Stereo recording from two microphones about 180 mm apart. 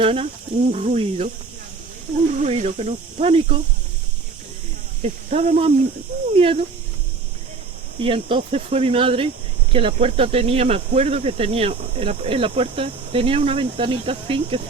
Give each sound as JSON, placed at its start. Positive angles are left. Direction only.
{"t": 0.0, "sound": "speech", "side_deg": -30}
{"t": 2.4, "sound": "speech", "side_deg": -40}
{"t": 5.0, "sound": "speech", "side_deg": -35}
{"t": 7.9, "sound": "speech", "side_deg": -30}